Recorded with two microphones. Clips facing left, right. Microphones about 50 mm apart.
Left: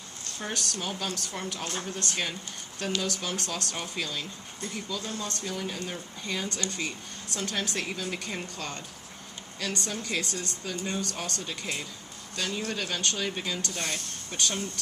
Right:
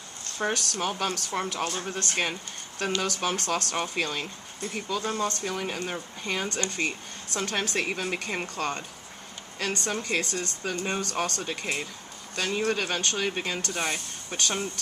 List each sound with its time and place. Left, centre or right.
0.4 s speech: right
5.8 s speech: right
13.7 s speech: centre